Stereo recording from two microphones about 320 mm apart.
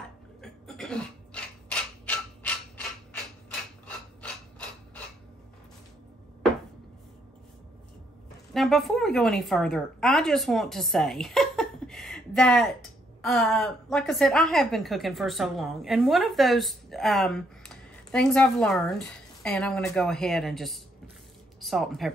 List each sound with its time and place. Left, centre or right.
0.4 s a sound: centre
3.8 s mechanisms: centre
8.5 s a woman's voice: centre